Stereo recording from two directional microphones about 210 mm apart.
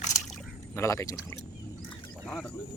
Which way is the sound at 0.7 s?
15° left (ahead or behind).